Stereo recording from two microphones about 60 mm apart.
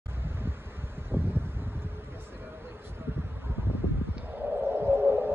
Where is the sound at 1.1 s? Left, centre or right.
Right.